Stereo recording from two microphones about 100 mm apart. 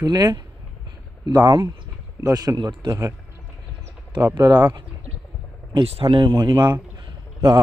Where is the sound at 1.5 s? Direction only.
50° right (ahead or behind).